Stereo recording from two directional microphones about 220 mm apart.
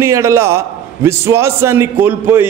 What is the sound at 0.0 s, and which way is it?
A man's voice, 10° right (ahead or behind).